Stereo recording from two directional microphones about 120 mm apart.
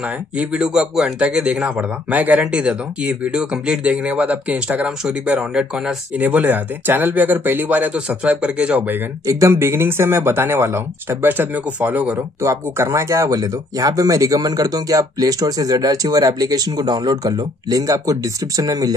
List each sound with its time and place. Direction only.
0.0 s speech: 10° right (ahead or behind)
9.2 s speech: 25° right (ahead or behind)